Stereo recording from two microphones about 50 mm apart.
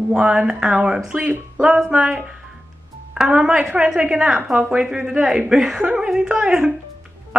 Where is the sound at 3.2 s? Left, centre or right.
Centre.